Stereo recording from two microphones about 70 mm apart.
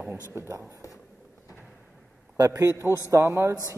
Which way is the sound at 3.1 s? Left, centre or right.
Right.